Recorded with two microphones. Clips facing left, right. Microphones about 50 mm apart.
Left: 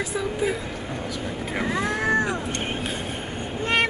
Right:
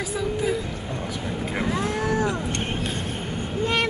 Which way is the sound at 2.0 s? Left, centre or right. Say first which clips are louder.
Left 2 dB; left.